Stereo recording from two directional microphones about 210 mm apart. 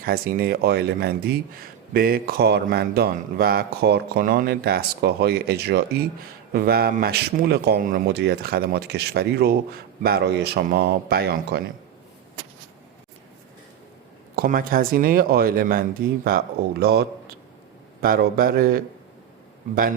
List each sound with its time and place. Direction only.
0.0 s speech: 45° right (ahead or behind)
14.3 s speech: 45° right (ahead or behind)